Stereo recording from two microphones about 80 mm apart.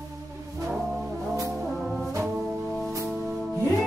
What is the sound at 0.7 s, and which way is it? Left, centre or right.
Brass instrument, centre.